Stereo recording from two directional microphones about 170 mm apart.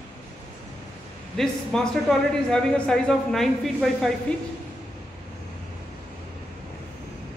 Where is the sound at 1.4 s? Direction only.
5° left (ahead or behind).